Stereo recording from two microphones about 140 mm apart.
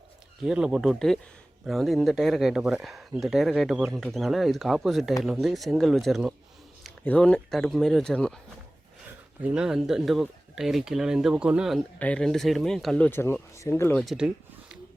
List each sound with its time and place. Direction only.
0.4 s speech: 5° right (ahead or behind)
7.0 s speech: 10° left (ahead or behind)
9.4 s speech: 5° right (ahead or behind)
11.9 s speech: 10° left (ahead or behind)
13.1 s speech: 15° left (ahead or behind)
14.0 s a sound: 5° right (ahead or behind)